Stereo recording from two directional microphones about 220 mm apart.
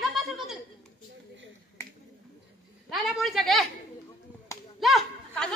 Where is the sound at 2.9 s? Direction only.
Centre (ahead or behind).